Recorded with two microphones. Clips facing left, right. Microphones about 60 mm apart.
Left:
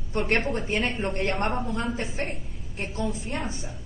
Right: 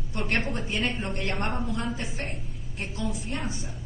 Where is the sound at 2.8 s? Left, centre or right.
Left.